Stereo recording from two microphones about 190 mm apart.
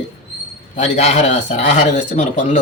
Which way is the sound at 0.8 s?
35° left (ahead or behind).